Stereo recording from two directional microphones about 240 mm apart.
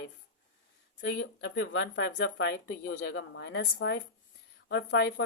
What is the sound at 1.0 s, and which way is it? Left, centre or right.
Speech, left.